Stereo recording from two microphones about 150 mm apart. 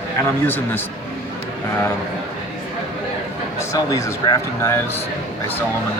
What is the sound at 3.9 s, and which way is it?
Speech, 20° left (ahead or behind).